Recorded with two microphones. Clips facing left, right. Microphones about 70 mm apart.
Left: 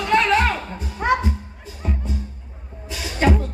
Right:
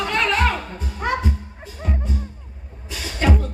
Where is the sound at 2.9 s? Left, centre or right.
Left.